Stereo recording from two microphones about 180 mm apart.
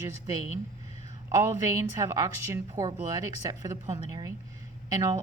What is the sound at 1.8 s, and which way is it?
Speech, 20° right (ahead or behind).